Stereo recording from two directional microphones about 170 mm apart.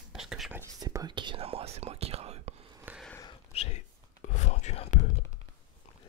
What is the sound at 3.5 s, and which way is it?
Whispering, 40° left (ahead or behind).